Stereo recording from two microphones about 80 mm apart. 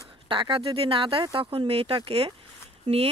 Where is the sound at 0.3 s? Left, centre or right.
Right.